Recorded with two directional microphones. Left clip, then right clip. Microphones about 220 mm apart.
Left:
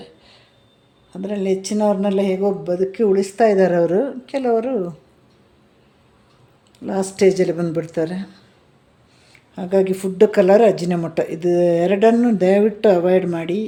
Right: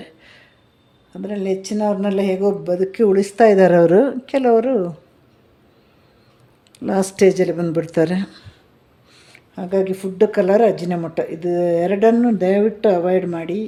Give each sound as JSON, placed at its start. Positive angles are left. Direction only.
{"t": 0.0, "sound": "a sound", "side_deg": -15}
{"t": 1.1, "sound": "speech", "side_deg": 0}
{"t": 6.7, "sound": "speech", "side_deg": -25}
{"t": 7.3, "sound": "speech", "side_deg": -5}
{"t": 9.6, "sound": "speech", "side_deg": 0}